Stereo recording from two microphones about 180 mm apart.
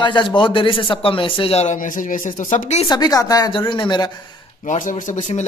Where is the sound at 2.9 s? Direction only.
20° left (ahead or behind).